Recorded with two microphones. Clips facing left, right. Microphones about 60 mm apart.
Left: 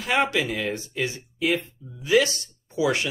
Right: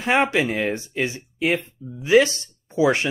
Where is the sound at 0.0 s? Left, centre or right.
Right.